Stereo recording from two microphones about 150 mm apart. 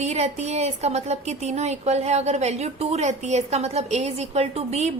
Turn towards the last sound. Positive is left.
turn(degrees=-45)  # may be behind; listen again after turning